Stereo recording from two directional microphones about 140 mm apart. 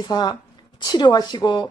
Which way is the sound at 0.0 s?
30° left (ahead or behind).